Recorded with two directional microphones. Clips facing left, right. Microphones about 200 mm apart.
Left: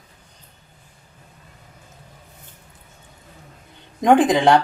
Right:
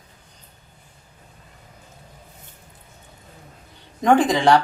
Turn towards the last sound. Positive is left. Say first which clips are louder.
# left 2 dB
turn(degrees=15)  # may be behind; listen again after turning